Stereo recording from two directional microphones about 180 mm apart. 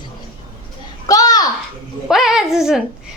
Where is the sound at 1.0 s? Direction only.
20° left (ahead or behind).